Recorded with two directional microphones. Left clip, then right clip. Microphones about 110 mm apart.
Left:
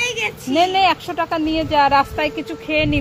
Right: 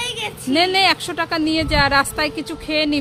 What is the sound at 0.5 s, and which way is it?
A woman's voice, 15° right (ahead or behind).